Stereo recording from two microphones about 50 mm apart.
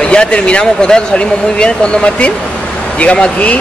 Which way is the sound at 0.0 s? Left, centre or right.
Centre.